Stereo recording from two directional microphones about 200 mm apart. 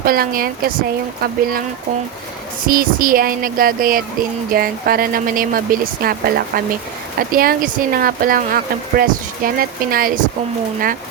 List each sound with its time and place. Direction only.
0.0 s speech: 45° right (ahead or behind)
2.6 s speech: 45° right (ahead or behind)